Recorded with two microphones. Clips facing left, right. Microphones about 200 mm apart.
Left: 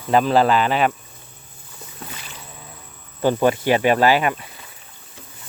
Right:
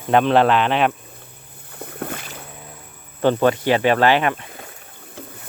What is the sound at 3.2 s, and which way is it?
Speech, 10° left (ahead or behind).